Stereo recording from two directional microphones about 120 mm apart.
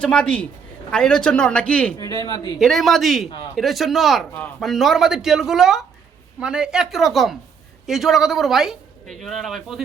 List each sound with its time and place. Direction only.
0.0 s a man's voice: 10° left (ahead or behind)
2.0 s speech: 30° left (ahead or behind)
2.6 s speech: centre (ahead or behind)